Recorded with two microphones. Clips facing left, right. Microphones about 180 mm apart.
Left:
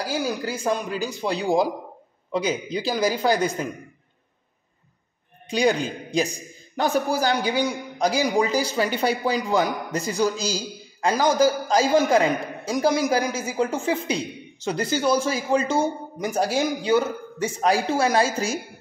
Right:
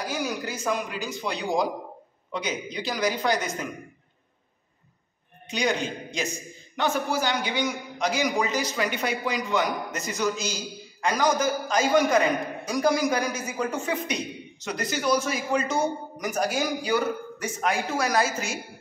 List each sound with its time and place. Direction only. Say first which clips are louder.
0.0 s a man's voice: left 4 dB; 30° left (ahead or behind)
5.5 s a man's voice: left 5 dB; 35° left (ahead or behind)